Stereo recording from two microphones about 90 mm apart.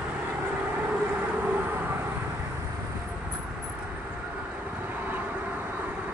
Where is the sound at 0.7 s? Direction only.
15° right (ahead or behind).